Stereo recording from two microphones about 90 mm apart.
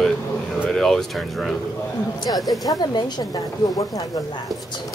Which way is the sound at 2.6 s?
45° left (ahead or behind).